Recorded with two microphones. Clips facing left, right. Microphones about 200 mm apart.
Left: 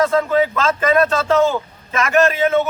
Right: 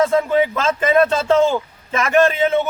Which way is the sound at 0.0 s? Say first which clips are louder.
Even; 20° right (ahead or behind).